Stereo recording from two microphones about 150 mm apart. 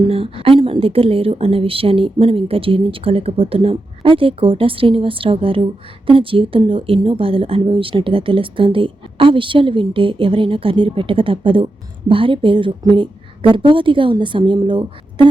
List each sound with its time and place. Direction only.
0.1 s a woman's voice: 40° right (ahead or behind)